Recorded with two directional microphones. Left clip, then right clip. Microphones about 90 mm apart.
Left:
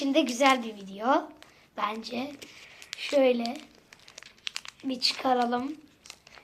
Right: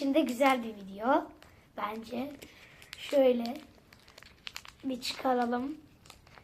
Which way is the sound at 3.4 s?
15° left (ahead or behind).